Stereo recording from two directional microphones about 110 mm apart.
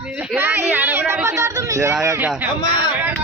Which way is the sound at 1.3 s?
30° right (ahead or behind).